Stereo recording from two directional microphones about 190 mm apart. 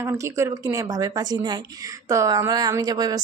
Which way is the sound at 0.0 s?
15° right (ahead or behind).